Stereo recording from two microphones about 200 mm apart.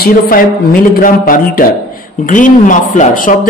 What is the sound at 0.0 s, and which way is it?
A man's voice, 45° left (ahead or behind).